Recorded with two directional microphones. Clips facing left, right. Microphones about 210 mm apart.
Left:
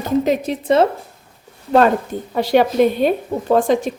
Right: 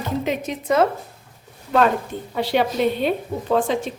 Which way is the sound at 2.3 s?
45° left (ahead or behind).